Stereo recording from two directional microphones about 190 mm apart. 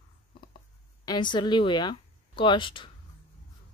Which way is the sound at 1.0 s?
25° left (ahead or behind).